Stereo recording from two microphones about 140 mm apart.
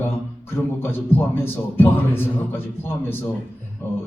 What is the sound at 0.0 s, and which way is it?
A man's voice, 15° left (ahead or behind).